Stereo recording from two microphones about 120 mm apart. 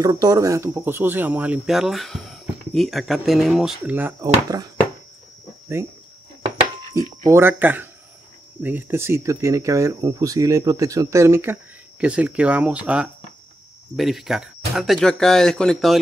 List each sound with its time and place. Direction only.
0.0 s speech: 30° right (ahead or behind); by 3.7 s centre (ahead or behind)
3.8 s speech: 15° right (ahead or behind)
4.2 s speech: 30° right (ahead or behind)
7.2 s speech: 20° right (ahead or behind); by 16.0 s 5° left (ahead or behind)